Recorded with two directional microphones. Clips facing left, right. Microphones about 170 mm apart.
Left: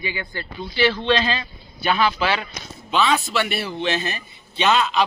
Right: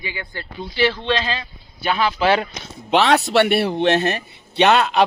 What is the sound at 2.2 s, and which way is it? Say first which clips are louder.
Speech: right 6 dB; 50° right (ahead or behind).